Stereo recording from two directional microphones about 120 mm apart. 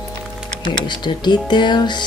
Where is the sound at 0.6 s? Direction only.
40° left (ahead or behind).